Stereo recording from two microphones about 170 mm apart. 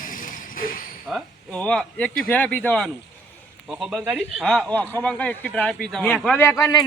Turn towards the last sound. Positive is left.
turn(degrees=20)  # may be behind; listen again after turning